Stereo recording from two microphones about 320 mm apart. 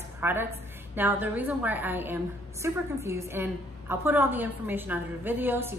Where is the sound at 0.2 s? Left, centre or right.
Centre.